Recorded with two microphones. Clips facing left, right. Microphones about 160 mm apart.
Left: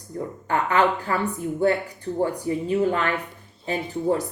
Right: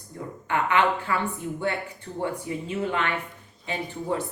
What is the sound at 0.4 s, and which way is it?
Speech, 40° left (ahead or behind).